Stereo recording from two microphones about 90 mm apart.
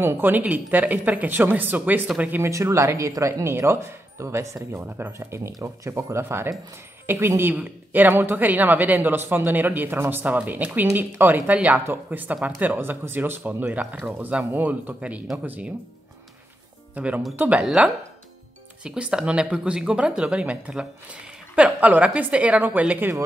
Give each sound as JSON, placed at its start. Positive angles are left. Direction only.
{"t": 0.0, "sound": "a woman's voice", "side_deg": -25}
{"t": 2.4, "sound": "speech", "side_deg": -35}
{"t": 4.7, "sound": "a woman's voice", "side_deg": -20}
{"t": 16.9, "sound": "speech", "side_deg": -15}